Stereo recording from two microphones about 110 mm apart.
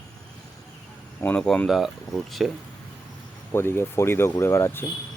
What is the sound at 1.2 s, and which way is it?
Speech, 15° left (ahead or behind).